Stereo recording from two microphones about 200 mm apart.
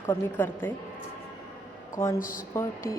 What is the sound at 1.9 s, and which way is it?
Speech, 15° left (ahead or behind).